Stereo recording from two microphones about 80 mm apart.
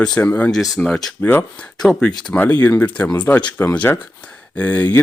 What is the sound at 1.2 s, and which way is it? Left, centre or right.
Speech, left.